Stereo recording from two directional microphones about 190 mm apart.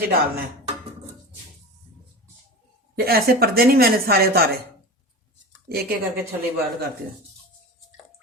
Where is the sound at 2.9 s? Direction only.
55° right (ahead or behind).